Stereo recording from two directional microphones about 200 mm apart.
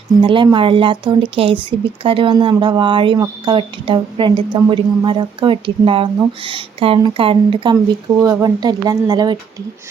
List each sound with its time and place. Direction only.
0.2 s speech: 25° right (ahead or behind)